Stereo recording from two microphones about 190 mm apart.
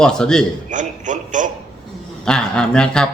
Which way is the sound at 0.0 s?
5° left (ahead or behind).